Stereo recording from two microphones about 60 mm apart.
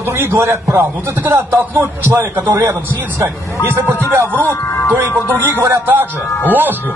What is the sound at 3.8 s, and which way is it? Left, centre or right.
Speech, right.